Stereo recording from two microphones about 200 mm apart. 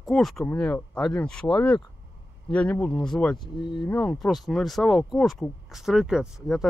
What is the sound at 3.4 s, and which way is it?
Speech, 25° left (ahead or behind).